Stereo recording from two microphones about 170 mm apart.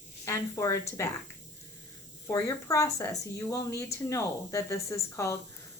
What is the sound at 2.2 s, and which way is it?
A woman's voice, 20° left (ahead or behind).